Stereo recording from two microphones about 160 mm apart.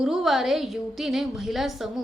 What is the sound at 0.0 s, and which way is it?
A woman's voice, centre (ahead or behind).